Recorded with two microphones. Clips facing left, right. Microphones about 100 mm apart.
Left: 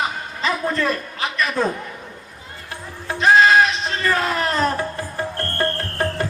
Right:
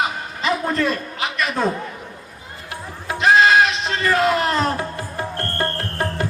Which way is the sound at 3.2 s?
35° left (ahead or behind).